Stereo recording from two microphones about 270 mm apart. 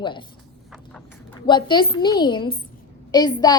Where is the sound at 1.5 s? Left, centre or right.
Centre.